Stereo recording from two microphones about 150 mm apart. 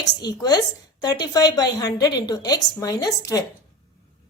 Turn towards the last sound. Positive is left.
turn(degrees=20)  # may be behind; listen again after turning